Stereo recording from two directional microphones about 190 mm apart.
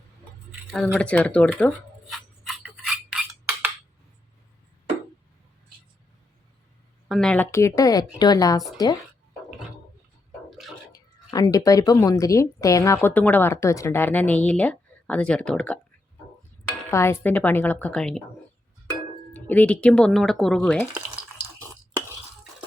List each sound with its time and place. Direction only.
0.7 s a sound: centre (ahead or behind)
7.1 s a woman's voice: 5° left (ahead or behind); by 9.0 s 20° left (ahead or behind)
10.9 s a woman's voice: 20° left (ahead or behind)
16.9 s a woman's voice: 15° left (ahead or behind)
19.3 s speech: 10° left (ahead or behind)
20.9 s a sound: 5° right (ahead or behind)